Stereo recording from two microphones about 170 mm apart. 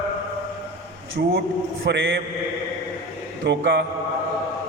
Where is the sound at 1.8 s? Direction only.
90° right.